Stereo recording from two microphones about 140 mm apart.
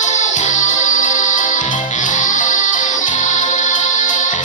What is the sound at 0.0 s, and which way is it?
Music, 60° left (ahead or behind).